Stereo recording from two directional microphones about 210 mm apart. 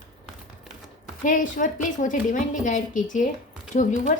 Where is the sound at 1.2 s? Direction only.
40° left (ahead or behind).